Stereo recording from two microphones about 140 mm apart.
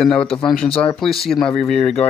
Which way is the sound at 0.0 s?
5° left (ahead or behind).